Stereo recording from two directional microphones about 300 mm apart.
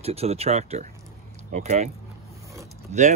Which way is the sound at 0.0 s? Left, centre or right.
Centre.